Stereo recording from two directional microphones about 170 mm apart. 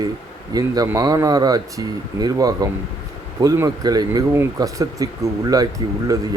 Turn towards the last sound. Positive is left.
turn(degrees=-20)  # may be behind; listen again after turning